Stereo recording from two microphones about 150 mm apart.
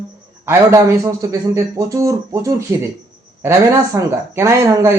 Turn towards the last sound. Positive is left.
turn(degrees=-20)  # may be behind; listen again after turning